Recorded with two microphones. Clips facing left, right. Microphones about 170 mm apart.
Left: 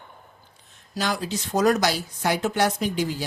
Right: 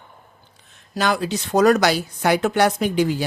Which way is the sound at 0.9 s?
65° right (ahead or behind).